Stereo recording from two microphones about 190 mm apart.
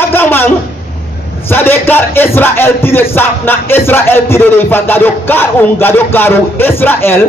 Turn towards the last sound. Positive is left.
turn(degrees=10)  # may be behind; listen again after turning